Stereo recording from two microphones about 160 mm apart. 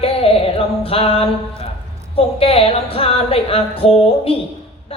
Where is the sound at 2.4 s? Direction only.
35° left (ahead or behind).